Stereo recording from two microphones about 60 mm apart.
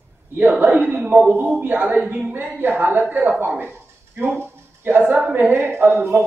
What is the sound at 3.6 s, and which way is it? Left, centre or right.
Dog, right.